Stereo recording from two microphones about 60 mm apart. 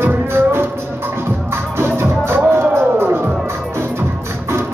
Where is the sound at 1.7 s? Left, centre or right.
Right.